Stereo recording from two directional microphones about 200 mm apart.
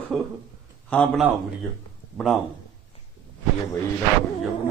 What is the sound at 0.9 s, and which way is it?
A man's voice, 5° left (ahead or behind).